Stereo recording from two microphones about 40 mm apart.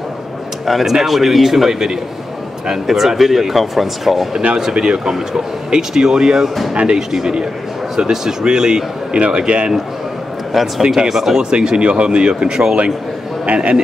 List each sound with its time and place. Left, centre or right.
0.7 s speech: centre
4.3 s speech: right
7.0 s speech: centre
9.1 s a man's voice: right
11.1 s speech: centre
11.5 s speech: right